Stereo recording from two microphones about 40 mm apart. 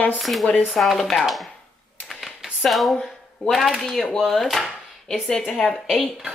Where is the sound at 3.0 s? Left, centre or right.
Centre.